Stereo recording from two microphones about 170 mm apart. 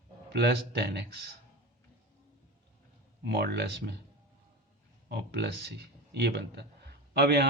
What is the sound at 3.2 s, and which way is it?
Speech, 75° right (ahead or behind).